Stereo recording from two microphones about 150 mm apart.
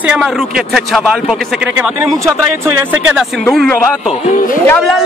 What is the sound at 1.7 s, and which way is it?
Speech, 15° right (ahead or behind).